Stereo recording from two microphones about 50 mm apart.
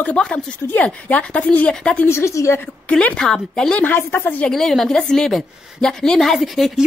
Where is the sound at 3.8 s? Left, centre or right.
Left.